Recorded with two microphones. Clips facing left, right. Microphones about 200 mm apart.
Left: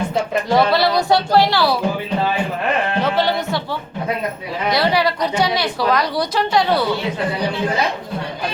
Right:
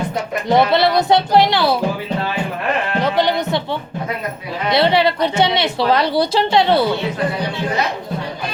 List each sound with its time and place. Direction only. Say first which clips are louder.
0.4 s a woman's voice: right 3 dB; 20° right (ahead or behind)
3.0 s a woman's voice: right 4 dB; 15° right (ahead or behind)